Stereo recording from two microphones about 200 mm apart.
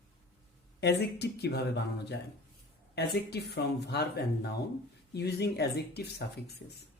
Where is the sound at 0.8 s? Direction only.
55° left (ahead or behind).